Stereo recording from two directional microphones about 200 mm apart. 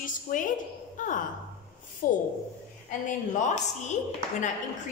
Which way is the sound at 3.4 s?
35° left (ahead or behind).